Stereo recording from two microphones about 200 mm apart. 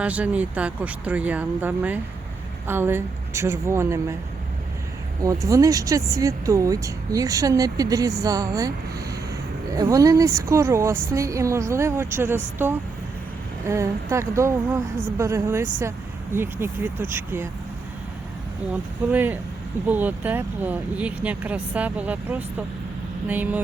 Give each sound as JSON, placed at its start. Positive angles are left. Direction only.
{"t": 0.0, "sound": "speech", "side_deg": -5}
{"t": 5.2, "sound": "speech", "side_deg": -15}
{"t": 13.7, "sound": "speech", "side_deg": -15}
{"t": 19.1, "sound": "speech", "side_deg": -10}